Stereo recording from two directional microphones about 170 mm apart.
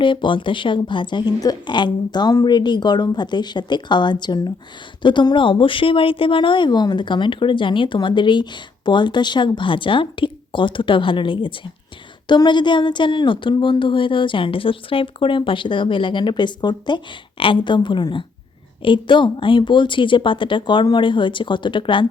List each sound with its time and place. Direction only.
0.0 s speech: 30° left (ahead or behind)